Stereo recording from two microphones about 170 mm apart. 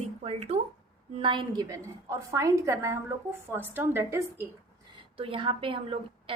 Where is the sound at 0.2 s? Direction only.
40° right (ahead or behind); by 4.4 s 15° right (ahead or behind).